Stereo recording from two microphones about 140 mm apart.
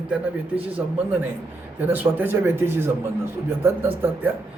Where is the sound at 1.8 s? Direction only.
15° right (ahead or behind).